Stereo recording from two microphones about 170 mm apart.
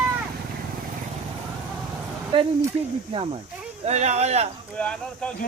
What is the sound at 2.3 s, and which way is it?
Speech, 30° right (ahead or behind).